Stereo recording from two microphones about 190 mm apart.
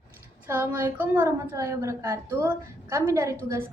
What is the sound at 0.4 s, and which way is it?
A woman's voice, 10° right (ahead or behind).